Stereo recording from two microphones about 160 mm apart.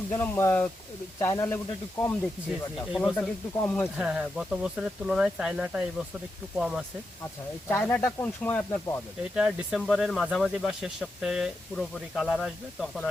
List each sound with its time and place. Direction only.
0.1 s speech: 15° left (ahead or behind)
3.9 s speech: 5° right (ahead or behind)
7.7 s speech: 10° left (ahead or behind)
9.3 s speech: 5° right (ahead or behind)